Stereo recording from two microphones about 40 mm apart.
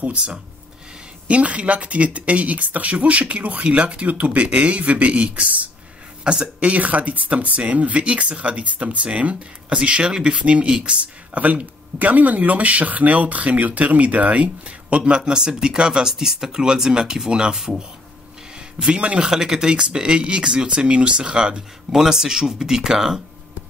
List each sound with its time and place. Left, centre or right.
0.0 s speech: right
11.3 s speech: right; by 17.8 s centre
18.5 s a sound: right
19.2 s speech: centre